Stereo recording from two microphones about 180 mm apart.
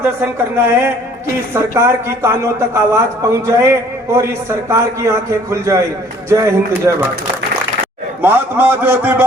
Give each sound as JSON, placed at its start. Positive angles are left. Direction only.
{"t": 0.0, "sound": "a man's voice", "side_deg": -15}
{"t": 8.2, "sound": "a man's voice", "side_deg": -10}